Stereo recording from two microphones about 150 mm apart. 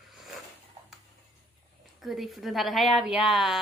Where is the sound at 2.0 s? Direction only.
Centre (ahead or behind).